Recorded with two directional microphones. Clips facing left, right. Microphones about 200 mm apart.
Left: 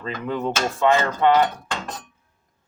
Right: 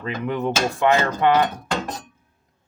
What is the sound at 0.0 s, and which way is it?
Speech, 15° right (ahead or behind).